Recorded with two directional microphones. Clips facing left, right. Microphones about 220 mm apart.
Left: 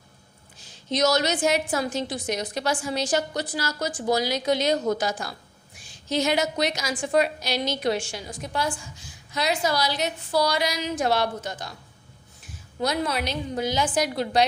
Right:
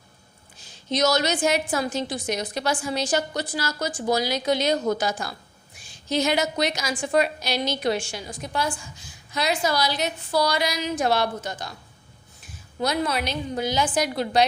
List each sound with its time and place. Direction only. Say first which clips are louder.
1.0 s a woman's voice: even; 45° left (ahead or behind); by 11.7 s 30° left (ahead or behind)
12.8 s a woman's voice: right 1 dB; 35° left (ahead or behind)